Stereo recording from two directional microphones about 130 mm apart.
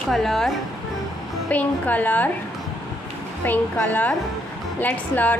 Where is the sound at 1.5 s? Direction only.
10° left (ahead or behind).